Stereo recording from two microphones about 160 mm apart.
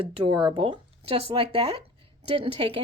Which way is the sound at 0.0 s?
35° right (ahead or behind).